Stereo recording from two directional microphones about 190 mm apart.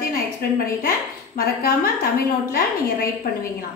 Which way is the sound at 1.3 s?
50° left (ahead or behind).